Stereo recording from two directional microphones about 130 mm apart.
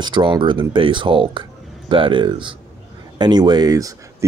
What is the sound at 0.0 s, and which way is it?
Speech, 35° right (ahead or behind).